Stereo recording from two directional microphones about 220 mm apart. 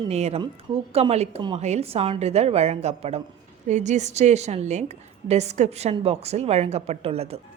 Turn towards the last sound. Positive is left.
turn(degrees=-25)  # may be behind; listen again after turning